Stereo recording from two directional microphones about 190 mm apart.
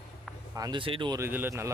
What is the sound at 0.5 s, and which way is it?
Speech, 20° right (ahead or behind).